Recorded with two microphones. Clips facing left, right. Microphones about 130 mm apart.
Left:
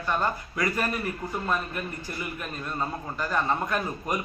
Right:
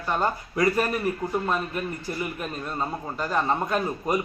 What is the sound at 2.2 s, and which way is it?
A man's voice, 25° right (ahead or behind).